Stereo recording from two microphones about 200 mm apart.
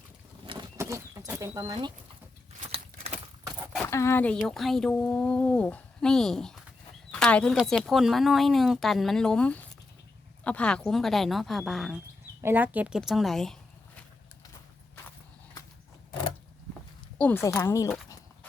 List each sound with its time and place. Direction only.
0.8 s bird: 15° right (ahead or behind)
1.3 s speech: 15° right (ahead or behind)
2.7 s a sound: 30° right (ahead or behind)
3.8 s speech: 15° left (ahead or behind)
7.1 s a sound: 5° left (ahead or behind)
7.5 s speech: centre (ahead or behind)
17.2 s speech: 10° left (ahead or behind)